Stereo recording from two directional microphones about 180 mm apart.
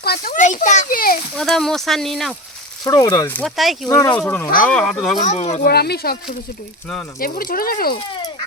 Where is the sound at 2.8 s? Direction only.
20° left (ahead or behind).